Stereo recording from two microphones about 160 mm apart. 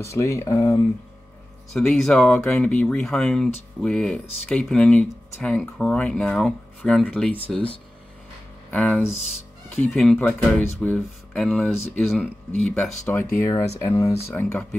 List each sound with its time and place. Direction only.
0.0 s speech: 20° left (ahead or behind)
1.7 s speech: 5° left (ahead or behind)
13.2 s speech: 15° left (ahead or behind)